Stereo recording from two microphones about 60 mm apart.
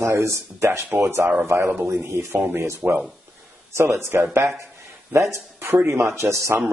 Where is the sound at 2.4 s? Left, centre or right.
Right.